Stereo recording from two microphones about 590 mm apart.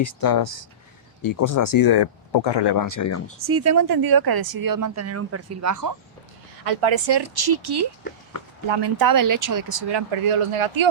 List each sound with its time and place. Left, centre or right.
0.0 s speech: left
3.4 s speech: right
6.7 s speech: right
10.1 s speech: right